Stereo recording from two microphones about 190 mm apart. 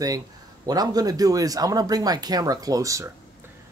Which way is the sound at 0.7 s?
20° right (ahead or behind).